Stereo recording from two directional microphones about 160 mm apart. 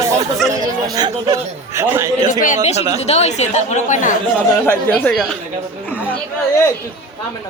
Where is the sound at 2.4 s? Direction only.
50° left (ahead or behind).